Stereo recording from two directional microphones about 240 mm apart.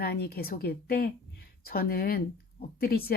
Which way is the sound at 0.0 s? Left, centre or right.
Left.